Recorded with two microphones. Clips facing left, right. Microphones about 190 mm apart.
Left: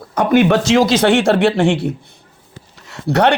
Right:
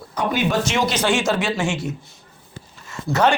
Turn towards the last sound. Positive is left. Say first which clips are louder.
# left 4 dB
turn(degrees=65)  # may be behind; listen again after turning